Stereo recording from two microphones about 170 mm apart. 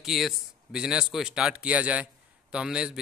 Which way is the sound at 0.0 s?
Centre (ahead or behind).